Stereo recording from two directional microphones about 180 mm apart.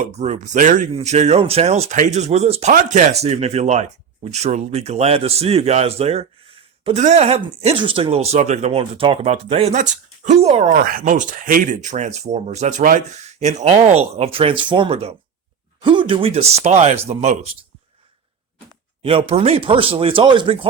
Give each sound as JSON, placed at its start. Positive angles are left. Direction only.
{"t": 0.0, "sound": "speech", "side_deg": -40}
{"t": 19.0, "sound": "speech", "side_deg": -35}